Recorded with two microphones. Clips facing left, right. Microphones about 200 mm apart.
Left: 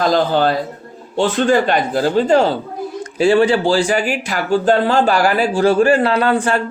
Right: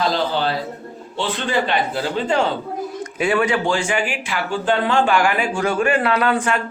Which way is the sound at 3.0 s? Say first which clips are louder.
Left 7 dB; 30° left (ahead or behind).